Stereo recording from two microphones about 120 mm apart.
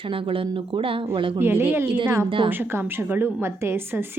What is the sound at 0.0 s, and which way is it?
Speech, 45° right (ahead or behind).